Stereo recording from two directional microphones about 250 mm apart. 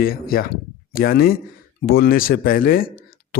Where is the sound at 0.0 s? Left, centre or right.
Left.